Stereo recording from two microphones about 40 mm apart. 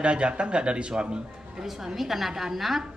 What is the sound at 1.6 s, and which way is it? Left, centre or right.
A woman's voice, centre.